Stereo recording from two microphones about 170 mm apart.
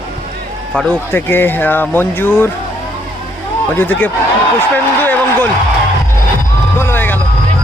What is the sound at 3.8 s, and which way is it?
Speech, 10° left (ahead or behind).